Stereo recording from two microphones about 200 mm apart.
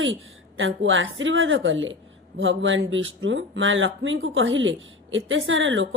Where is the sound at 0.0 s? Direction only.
75° right (ahead or behind).